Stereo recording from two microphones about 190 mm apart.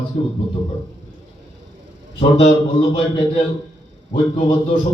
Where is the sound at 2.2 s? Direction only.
30° left (ahead or behind).